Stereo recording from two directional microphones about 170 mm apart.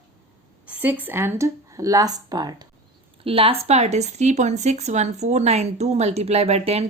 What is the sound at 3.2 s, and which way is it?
Speech, 35° right (ahead or behind).